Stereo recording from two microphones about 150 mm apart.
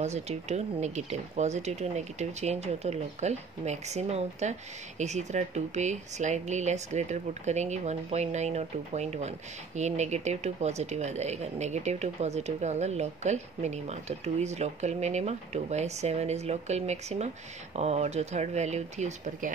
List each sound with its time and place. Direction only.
0.0 s speech: 45° right (ahead or behind)